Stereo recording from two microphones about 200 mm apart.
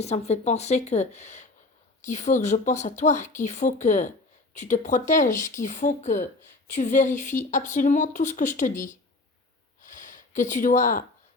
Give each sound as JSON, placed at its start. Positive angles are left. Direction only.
{"t": 0.0, "sound": "speech", "side_deg": 35}
{"t": 9.8, "sound": "gasp", "side_deg": 40}